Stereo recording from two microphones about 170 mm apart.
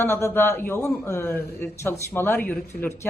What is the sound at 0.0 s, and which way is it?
Speech, 15° left (ahead or behind).